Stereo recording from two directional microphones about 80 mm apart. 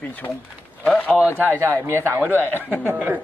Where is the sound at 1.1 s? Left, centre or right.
Right.